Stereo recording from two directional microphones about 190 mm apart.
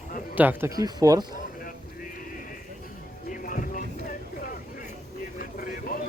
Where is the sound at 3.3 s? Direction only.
45° left (ahead or behind).